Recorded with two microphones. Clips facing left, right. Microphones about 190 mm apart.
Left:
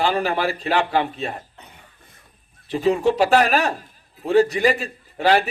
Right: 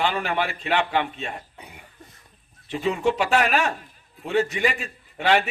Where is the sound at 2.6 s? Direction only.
35° left (ahead or behind).